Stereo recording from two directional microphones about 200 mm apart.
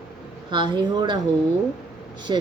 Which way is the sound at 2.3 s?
20° right (ahead or behind).